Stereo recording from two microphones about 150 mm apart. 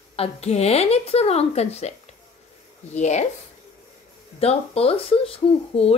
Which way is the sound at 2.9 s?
50° left (ahead or behind).